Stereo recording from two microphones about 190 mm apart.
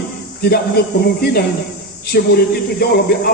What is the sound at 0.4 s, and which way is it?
A woman's voice, 55° left (ahead or behind).